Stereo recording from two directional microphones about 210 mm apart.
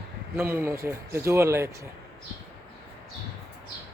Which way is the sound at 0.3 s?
10° right (ahead or behind).